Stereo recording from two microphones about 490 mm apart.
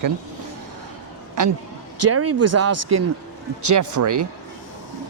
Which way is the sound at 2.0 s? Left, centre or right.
Right.